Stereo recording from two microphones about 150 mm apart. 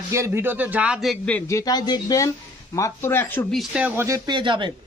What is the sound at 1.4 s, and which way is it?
Speech, 20° left (ahead or behind).